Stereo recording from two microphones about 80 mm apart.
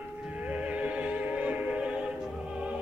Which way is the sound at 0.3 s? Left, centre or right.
Centre.